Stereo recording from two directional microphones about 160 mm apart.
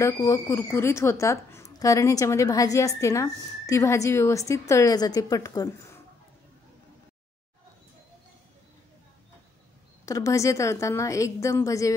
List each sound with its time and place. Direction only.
0.0 s a woman's voice: 20° left (ahead or behind)
10.0 s a woman's voice: 20° left (ahead or behind)